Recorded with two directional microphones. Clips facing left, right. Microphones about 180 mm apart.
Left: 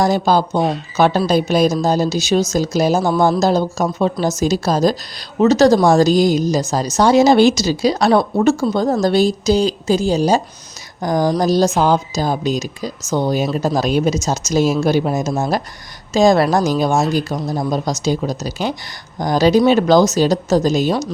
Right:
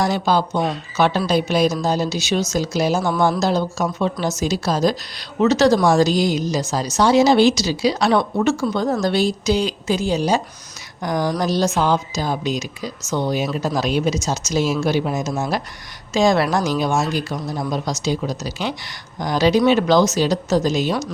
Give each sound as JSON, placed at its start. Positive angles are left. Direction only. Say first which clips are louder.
{"t": 0.0, "sound": "a woman's voice", "louder": "left 4 dB", "side_deg": 45}
{"t": 0.6, "sound": "speech", "louder": "left 4 dB", "side_deg": 30}
{"t": 1.3, "sound": "a woman's voice", "louder": "left 3 dB", "side_deg": 45}